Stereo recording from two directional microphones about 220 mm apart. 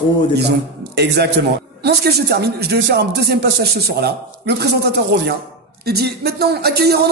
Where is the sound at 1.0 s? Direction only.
45° right (ahead or behind).